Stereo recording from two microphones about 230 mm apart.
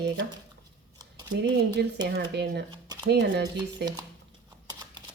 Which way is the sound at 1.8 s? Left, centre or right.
Right.